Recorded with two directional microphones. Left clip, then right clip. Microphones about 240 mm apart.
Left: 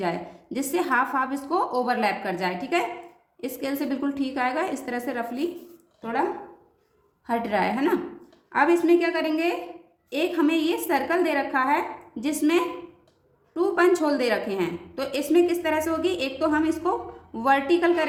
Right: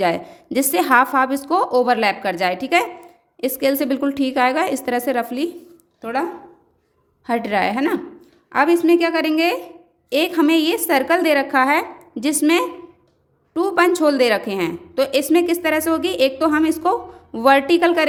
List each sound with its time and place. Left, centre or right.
0.0 s a woman's voice: right
7.3 s a woman's voice: right